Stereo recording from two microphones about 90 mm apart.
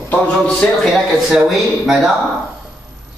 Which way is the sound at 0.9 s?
5° right (ahead or behind).